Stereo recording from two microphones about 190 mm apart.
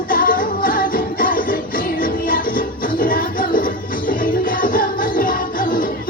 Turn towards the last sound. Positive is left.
turn(degrees=45)  # may be behind; listen again after turning